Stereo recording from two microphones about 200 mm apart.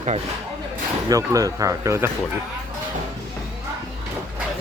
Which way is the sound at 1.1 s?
15° right (ahead or behind).